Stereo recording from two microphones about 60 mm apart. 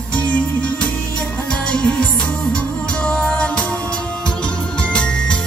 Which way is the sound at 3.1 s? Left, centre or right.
Centre.